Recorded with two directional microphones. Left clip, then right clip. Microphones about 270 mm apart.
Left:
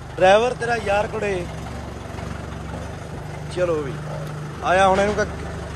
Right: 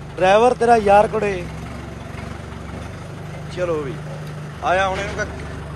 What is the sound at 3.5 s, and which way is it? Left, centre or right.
Speech, centre.